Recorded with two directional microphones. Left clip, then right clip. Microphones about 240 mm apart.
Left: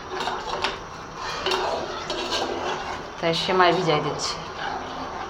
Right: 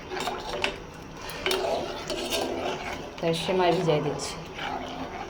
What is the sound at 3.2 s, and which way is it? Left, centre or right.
A woman's voice, centre.